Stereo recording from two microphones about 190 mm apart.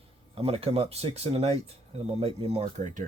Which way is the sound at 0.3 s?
30° right (ahead or behind).